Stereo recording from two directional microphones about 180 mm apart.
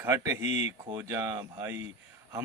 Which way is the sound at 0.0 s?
15° right (ahead or behind).